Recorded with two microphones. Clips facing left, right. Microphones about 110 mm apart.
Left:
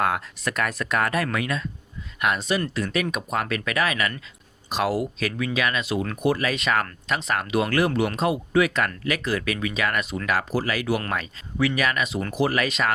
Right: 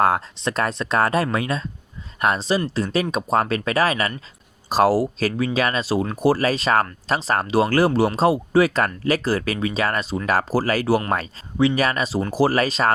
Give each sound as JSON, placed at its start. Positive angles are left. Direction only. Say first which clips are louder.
{"t": 0.0, "sound": "speech", "louder": "right 5 dB", "side_deg": -30}